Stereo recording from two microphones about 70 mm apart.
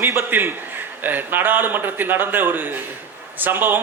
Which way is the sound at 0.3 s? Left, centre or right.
Right.